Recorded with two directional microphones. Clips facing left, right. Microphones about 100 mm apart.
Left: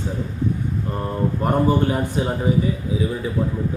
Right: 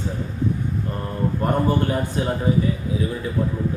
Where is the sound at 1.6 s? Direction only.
15° left (ahead or behind).